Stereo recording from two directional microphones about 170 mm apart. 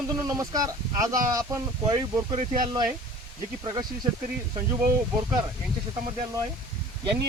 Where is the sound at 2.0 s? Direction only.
40° right (ahead or behind).